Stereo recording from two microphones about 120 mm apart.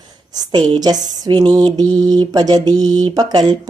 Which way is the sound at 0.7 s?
35° right (ahead or behind).